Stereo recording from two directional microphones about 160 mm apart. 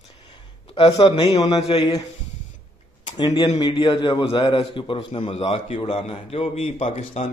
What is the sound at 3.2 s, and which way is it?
A man's voice, 30° left (ahead or behind).